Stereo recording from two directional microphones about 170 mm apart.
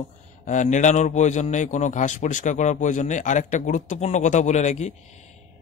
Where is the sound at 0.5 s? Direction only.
45° left (ahead or behind).